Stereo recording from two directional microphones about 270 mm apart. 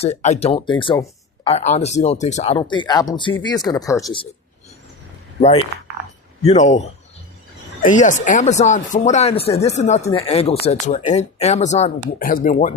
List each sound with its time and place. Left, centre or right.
0.0 s speech: left
6.4 s speech: left